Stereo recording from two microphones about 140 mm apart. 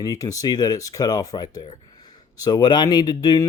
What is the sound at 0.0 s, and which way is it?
Speech, 25° left (ahead or behind).